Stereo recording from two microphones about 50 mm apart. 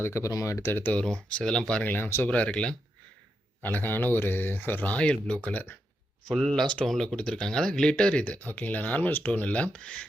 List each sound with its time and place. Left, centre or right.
0.0 s speech: left
0.6 s speech: left
1.0 s speech: centre
1.8 s speech: left
3.6 s speech: left
4.9 s speech: centre
6.2 s speech: centre
7.2 s speech: centre
8.2 s speech: left